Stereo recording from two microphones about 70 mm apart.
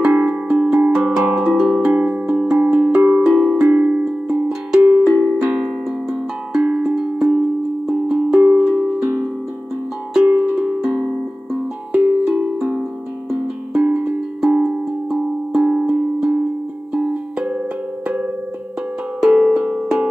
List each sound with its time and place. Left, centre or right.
0.0 s music: centre
2.0 s music: right
5.2 s music: centre
6.5 s music: centre
10.1 s music: centre
13.3 s music: centre
19.2 s music: centre